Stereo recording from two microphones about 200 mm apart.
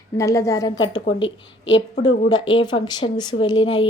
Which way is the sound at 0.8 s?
75° left (ahead or behind).